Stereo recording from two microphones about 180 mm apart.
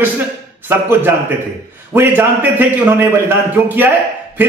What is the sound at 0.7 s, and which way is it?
A man's voice, 10° right (ahead or behind).